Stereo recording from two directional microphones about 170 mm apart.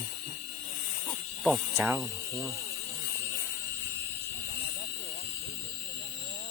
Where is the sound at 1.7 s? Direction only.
10° right (ahead or behind).